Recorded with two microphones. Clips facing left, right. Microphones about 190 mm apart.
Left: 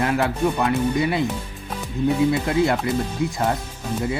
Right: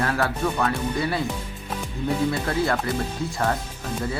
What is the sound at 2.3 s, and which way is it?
Speech, 15° left (ahead or behind).